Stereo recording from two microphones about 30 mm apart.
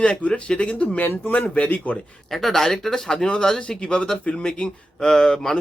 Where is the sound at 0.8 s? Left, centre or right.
Left.